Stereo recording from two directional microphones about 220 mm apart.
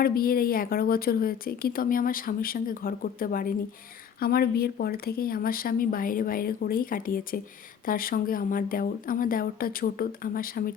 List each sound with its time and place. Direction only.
0.0 s a woman's voice: 40° left (ahead or behind)